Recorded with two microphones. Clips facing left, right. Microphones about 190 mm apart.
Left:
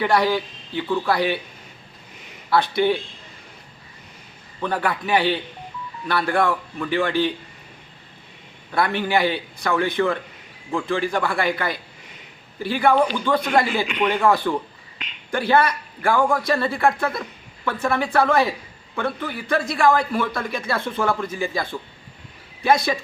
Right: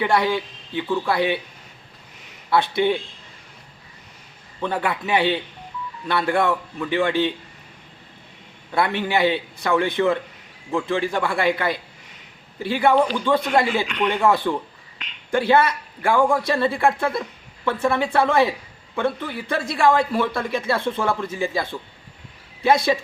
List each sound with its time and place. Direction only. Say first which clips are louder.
0.0 s a man's voice: left 1 dB; 25° right (ahead or behind)
2.5 s a man's voice: even; 25° right (ahead or behind)
4.6 s a man's voice: even; 25° right (ahead or behind)
8.7 s a man's voice: even; 25° right (ahead or behind)
13.8 s speech: left 1 dB; 5° left (ahead or behind)
14.3 s a man's voice: even; 25° right (ahead or behind)